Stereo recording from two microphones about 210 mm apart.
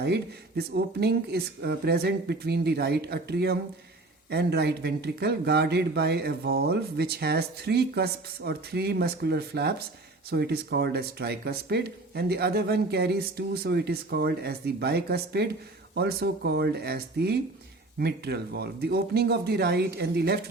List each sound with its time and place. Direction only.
0.0 s speech: 50° right (ahead or behind)